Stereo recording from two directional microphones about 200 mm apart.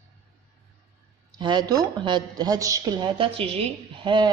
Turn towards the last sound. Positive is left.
turn(degrees=-25)  # may be behind; listen again after turning